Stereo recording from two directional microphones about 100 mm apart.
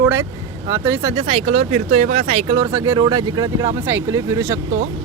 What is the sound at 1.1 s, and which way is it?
Speech, 80° right.